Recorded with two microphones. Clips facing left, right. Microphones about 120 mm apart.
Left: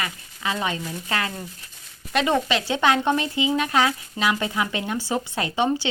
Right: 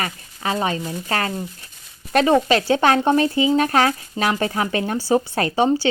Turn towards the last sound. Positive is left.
turn(degrees=-40)  # may be behind; listen again after turning